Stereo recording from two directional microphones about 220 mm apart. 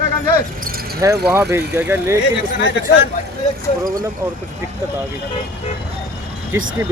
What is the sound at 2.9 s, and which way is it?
Speech, 50° left (ahead or behind).